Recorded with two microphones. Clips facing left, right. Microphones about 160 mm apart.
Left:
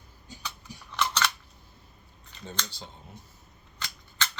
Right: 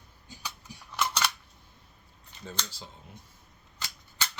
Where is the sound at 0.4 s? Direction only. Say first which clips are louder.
Left 1 dB; 10° right (ahead or behind).